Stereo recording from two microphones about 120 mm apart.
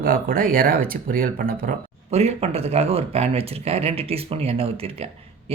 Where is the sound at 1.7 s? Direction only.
90° right.